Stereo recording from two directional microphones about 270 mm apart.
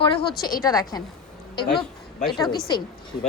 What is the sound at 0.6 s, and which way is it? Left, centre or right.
Speech, centre.